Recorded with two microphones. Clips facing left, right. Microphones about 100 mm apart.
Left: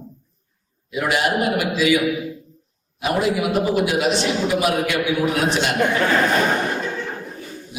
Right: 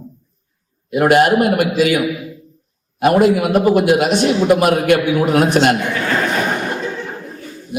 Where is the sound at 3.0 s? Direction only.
55° right (ahead or behind).